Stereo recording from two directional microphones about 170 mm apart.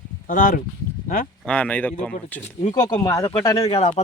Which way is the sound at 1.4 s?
10° left (ahead or behind).